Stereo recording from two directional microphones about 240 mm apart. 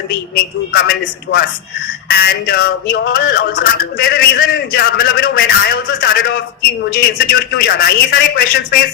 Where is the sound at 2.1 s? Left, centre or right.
Left.